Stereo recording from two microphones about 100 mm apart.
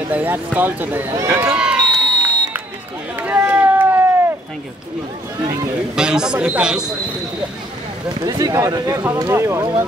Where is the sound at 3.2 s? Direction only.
20° right (ahead or behind).